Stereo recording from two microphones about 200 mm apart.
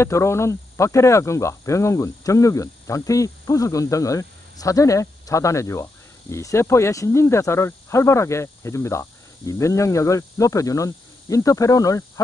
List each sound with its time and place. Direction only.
0.0 s speech: 15° left (ahead or behind)